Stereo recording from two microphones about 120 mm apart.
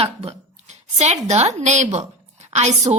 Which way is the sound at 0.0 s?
55° right (ahead or behind).